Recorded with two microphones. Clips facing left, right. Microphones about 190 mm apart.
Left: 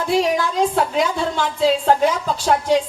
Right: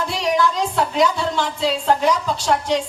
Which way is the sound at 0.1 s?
50° left (ahead or behind).